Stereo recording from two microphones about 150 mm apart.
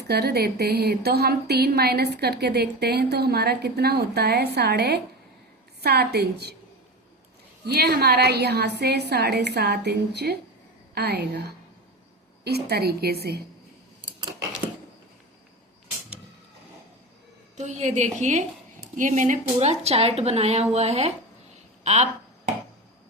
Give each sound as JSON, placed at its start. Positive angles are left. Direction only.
{"t": 0.1, "sound": "a woman's voice", "side_deg": -90}
{"t": 7.7, "sound": "a woman's voice", "side_deg": -90}
{"t": 17.6, "sound": "speech", "side_deg": -50}
{"t": 21.8, "sound": "a sound", "side_deg": -50}